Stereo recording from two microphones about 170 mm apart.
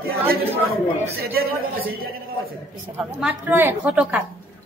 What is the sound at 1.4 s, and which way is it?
Speech, 60° right (ahead or behind).